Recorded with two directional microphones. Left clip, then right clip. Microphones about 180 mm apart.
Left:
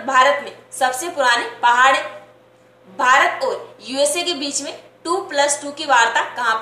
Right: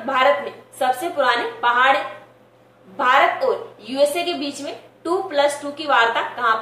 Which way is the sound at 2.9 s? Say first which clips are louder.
Left 1 dB; 15° left (ahead or behind).